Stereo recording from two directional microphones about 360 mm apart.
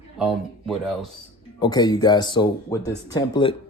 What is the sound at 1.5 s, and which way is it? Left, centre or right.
Speech, centre.